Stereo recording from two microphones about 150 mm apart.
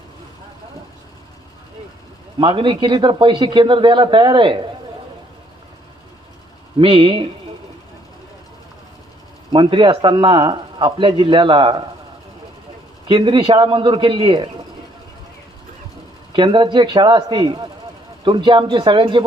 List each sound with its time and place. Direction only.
2.4 s speech: 35° right (ahead or behind)
6.7 s speech: 35° right (ahead or behind)
9.5 s speech: 35° right (ahead or behind)
13.1 s speech: 30° right (ahead or behind)
16.3 s speech: 30° right (ahead or behind)